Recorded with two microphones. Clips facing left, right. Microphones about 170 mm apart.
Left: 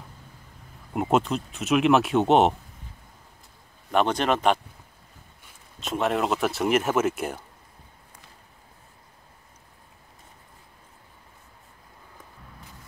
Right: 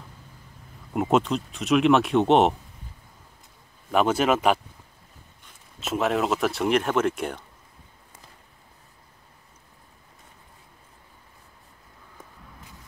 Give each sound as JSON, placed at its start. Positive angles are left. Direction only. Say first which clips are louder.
{"t": 0.9, "sound": "speech", "louder": "right 1 dB", "side_deg": 0}
{"t": 3.9, "sound": "speech", "louder": "right 2 dB", "side_deg": -5}
{"t": 5.8, "sound": "speech", "louder": "right 1 dB", "side_deg": 0}